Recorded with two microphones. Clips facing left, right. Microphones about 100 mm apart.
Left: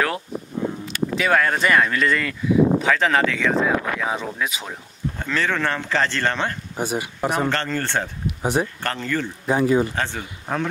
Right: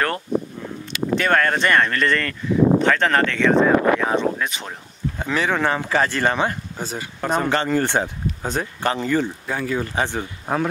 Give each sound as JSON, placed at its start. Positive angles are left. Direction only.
{"t": 0.8, "sound": "speech", "side_deg": 5}
{"t": 5.2, "sound": "speech", "side_deg": -15}
{"t": 6.8, "sound": "speech", "side_deg": 15}
{"t": 7.4, "sound": "speech", "side_deg": -15}
{"t": 8.4, "sound": "speech", "side_deg": 15}
{"t": 8.8, "sound": "speech", "side_deg": -15}
{"t": 9.5, "sound": "speech", "side_deg": 20}
{"t": 9.9, "sound": "speech", "side_deg": -15}